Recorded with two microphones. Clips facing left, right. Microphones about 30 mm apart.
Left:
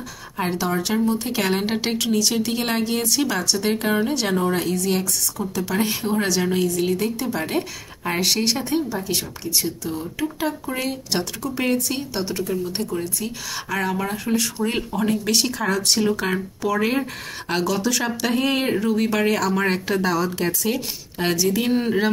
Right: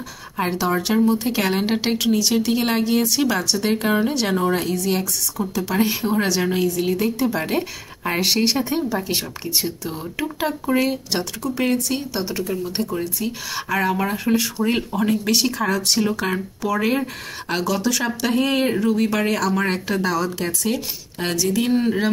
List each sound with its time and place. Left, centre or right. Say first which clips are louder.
0.4 s speech: right 2 dB; centre